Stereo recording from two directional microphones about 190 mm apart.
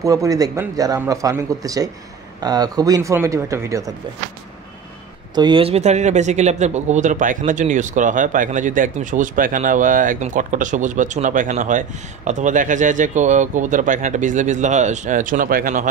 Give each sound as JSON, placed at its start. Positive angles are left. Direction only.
{"t": 0.0, "sound": "speech", "side_deg": -15}
{"t": 5.3, "sound": "speech", "side_deg": -25}